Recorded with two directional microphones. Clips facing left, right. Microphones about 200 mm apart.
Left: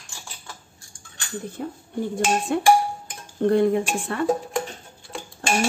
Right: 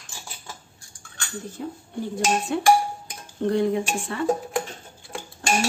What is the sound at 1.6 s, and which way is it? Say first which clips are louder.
Dishes: even; 55° left (ahead or behind).